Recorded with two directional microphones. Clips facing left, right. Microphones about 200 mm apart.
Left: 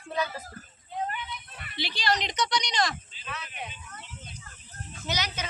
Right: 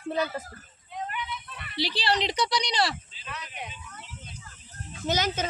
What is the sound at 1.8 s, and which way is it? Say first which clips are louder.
Speech: right 2 dB; 35° right (ahead or behind).